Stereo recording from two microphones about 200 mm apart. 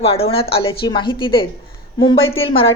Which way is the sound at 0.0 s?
30° left (ahead or behind).